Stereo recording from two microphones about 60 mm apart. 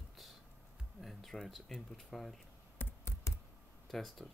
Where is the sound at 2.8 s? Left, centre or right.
Left.